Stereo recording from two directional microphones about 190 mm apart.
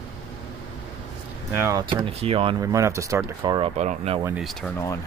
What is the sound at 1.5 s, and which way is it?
Speech, 15° right (ahead or behind).